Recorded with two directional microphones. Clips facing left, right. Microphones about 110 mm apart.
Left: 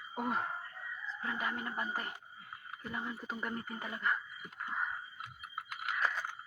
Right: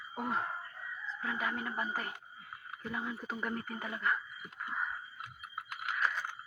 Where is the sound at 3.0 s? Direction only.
5° right (ahead or behind).